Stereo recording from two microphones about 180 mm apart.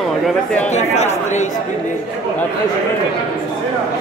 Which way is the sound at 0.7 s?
40° left (ahead or behind).